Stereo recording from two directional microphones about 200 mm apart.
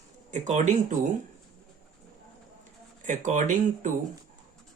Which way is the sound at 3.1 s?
40° right (ahead or behind).